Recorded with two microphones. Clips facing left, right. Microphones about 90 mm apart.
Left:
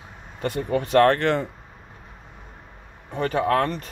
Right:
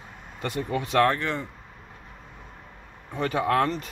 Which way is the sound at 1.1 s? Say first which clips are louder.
Left 6 dB; 90° left.